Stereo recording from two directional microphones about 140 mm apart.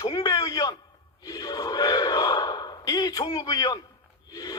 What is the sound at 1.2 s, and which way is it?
Gasp, 25° left (ahead or behind).